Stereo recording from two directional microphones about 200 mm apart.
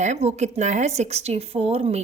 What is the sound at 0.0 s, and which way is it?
A woman's voice, 35° right (ahead or behind).